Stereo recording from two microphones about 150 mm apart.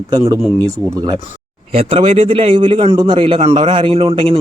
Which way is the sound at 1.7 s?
40° right (ahead or behind).